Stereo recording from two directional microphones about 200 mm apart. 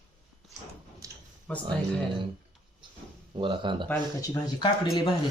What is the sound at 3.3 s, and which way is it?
Speech, 25° right (ahead or behind).